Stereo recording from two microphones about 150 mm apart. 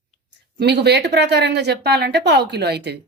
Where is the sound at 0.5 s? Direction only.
90° right.